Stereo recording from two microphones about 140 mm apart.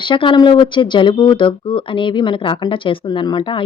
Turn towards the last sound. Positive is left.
turn(degrees=35)  # may be behind; listen again after turning